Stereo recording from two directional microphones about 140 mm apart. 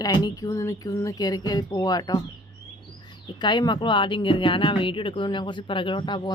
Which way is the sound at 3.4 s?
30° left (ahead or behind).